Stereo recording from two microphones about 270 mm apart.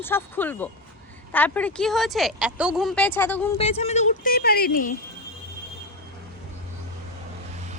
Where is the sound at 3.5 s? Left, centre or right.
Left.